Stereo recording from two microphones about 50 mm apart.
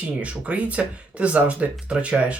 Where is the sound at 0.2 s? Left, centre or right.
Right.